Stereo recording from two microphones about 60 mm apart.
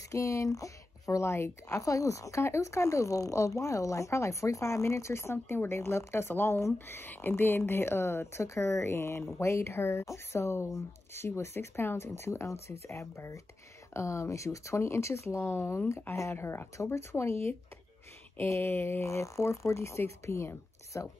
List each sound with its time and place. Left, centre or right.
0.1 s a woman's voice: left
1.8 s speech: left
18.5 s speech: left